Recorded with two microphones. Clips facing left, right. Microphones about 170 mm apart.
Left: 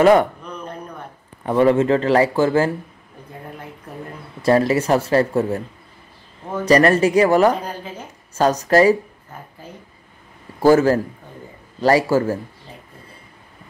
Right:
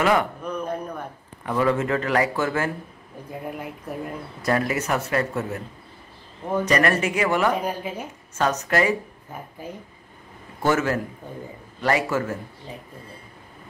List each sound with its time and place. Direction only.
0.0 s speech: 35° left (ahead or behind)
0.4 s a sound: 10° right (ahead or behind)
1.4 s a man's voice: 30° left (ahead or behind)
4.4 s speech: 30° left (ahead or behind)
6.6 s speech: 35° left (ahead or behind)
10.6 s speech: 35° left (ahead or behind)